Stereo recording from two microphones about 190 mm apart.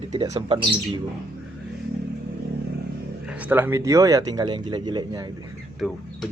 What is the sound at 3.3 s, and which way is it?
Speech, 5° right (ahead or behind).